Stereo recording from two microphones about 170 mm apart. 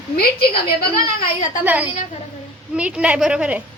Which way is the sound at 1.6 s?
10° right (ahead or behind).